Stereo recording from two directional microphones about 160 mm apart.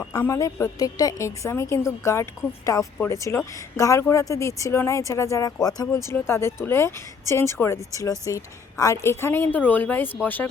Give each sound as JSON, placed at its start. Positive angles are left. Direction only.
{"t": 0.0, "sound": "a woman's voice", "side_deg": 20}